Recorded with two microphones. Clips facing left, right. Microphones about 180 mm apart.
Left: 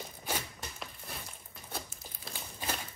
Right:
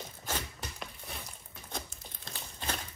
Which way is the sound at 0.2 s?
5° left (ahead or behind).